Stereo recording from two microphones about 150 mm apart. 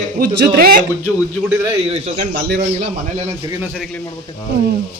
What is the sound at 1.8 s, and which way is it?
Speech, 45° right (ahead or behind).